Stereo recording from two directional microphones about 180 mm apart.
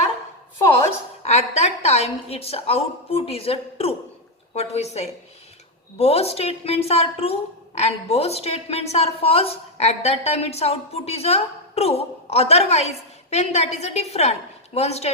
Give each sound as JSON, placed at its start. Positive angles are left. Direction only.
{"t": 1.2, "sound": "a woman's voice", "side_deg": 35}